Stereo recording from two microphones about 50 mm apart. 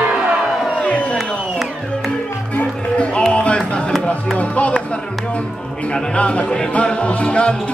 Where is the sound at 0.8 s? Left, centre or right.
Left.